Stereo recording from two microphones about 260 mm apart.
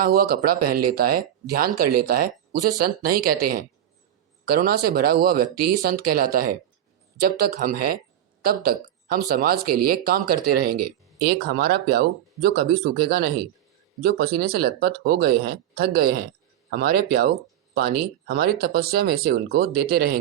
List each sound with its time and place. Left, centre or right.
0.0 s speech: right
9.1 s speech: right